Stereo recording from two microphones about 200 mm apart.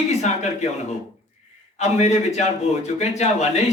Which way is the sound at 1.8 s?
35° left (ahead or behind).